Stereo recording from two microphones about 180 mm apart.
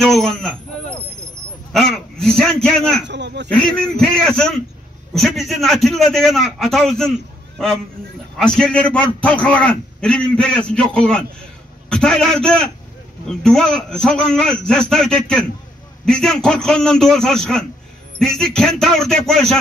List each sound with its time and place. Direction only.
0.0 s a man's voice: centre (ahead or behind)
3.1 s speech: 75° right (ahead or behind)
3.9 s a man's voice: 5° left (ahead or behind)